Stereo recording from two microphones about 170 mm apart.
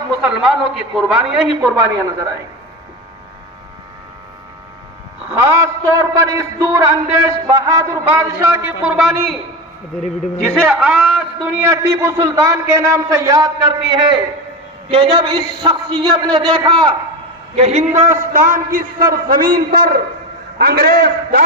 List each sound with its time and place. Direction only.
0.3 s a man's voice: centre (ahead or behind)
2.0 s a man's voice: 20° right (ahead or behind)
5.3 s a man's voice: 15° right (ahead or behind)
8.8 s a man's voice: 5° right (ahead or behind)
10.4 s a man's voice: centre (ahead or behind); by 16.9 s 25° right (ahead or behind)
17.6 s a man's voice: 40° right (ahead or behind); by 21.4 s 65° right (ahead or behind)